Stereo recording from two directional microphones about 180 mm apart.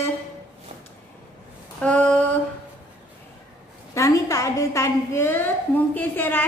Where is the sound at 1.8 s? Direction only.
5° left (ahead or behind).